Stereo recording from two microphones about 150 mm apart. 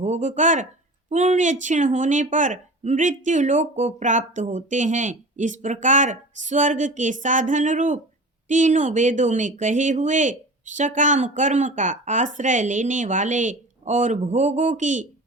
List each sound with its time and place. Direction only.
0.0 s a woman's voice: 50° right (ahead or behind)